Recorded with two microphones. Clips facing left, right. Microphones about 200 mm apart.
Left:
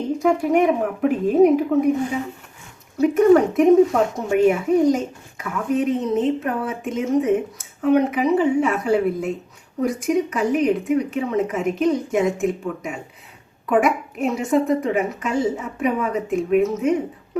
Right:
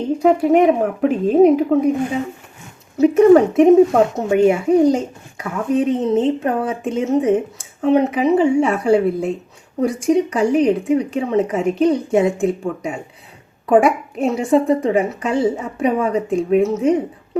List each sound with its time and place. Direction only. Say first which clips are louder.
0.2 s speech: right 5 dB; 25° right (ahead or behind)
3.0 s speech: right 4 dB; 25° right (ahead or behind)